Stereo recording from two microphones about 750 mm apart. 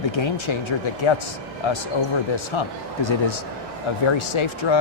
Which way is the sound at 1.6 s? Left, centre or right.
Left.